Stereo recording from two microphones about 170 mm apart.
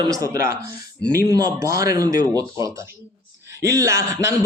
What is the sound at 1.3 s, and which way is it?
A man's voice, 20° right (ahead or behind).